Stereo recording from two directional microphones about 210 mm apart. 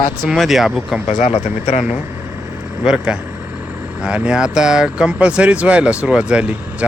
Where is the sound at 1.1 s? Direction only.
30° left (ahead or behind).